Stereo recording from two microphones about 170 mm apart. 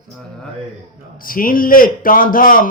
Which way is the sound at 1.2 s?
55° left (ahead or behind).